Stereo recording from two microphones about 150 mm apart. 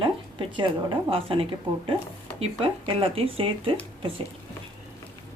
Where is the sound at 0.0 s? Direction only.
35° right (ahead or behind).